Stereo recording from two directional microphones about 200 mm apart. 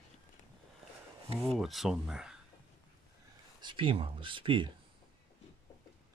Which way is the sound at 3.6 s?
25° right (ahead or behind).